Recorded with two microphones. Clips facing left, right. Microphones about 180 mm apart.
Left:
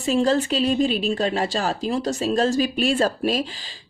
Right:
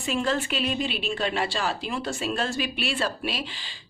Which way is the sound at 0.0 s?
35° left (ahead or behind).